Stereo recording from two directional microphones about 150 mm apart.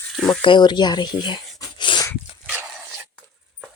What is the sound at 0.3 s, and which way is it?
Speech, 30° left (ahead or behind).